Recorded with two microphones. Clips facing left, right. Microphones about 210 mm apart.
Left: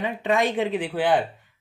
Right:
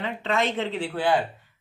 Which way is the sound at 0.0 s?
15° left (ahead or behind).